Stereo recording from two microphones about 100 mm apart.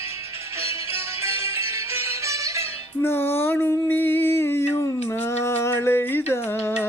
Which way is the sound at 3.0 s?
25° left (ahead or behind).